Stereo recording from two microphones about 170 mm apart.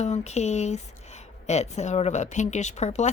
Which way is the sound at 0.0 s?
40° left (ahead or behind).